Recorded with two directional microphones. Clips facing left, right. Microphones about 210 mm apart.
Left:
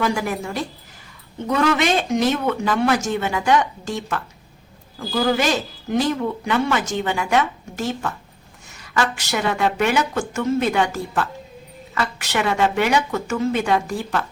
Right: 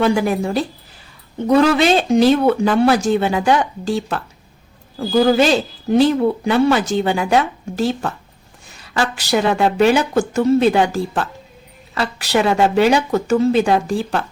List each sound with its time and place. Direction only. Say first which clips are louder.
0.0 s a man's voice: right 6 dB; 30° right (ahead or behind)